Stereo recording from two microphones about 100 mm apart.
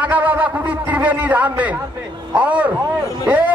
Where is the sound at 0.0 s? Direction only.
15° right (ahead or behind).